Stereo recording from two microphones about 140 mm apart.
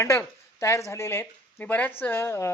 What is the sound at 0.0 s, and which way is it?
A woman's voice, 20° left (ahead or behind).